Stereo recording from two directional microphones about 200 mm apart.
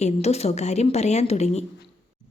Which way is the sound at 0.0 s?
30° left (ahead or behind).